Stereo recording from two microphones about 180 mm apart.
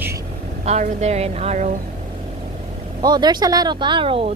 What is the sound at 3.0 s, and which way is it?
Speech, 25° right (ahead or behind).